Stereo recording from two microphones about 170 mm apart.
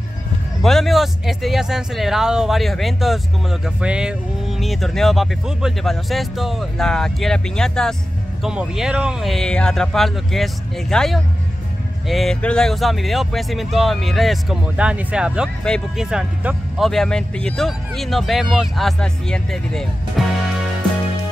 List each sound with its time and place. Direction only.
0.6 s speech: centre (ahead or behind)